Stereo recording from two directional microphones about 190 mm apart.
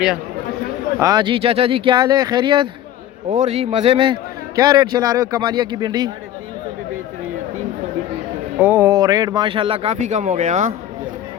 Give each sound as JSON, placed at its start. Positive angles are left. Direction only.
{"t": 0.9, "sound": "a man's voice", "side_deg": -20}
{"t": 8.5, "sound": "a man's voice", "side_deg": -10}